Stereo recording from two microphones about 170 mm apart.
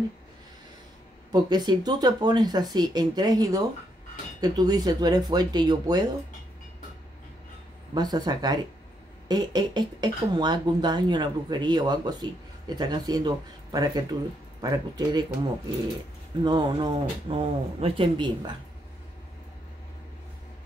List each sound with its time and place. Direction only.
1.3 s speech: 25° right (ahead or behind)
7.9 s speech: 25° right (ahead or behind)
16.4 s speech: 25° right (ahead or behind)